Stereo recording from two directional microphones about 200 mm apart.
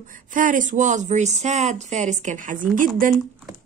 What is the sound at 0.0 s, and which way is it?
Speech, 40° right (ahead or behind).